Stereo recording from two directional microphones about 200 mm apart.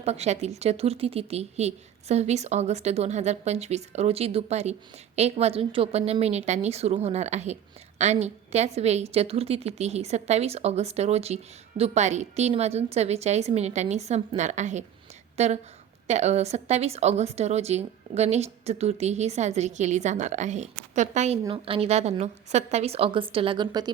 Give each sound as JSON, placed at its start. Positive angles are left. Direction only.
{"t": 0.0, "sound": "a woman's voice", "side_deg": -35}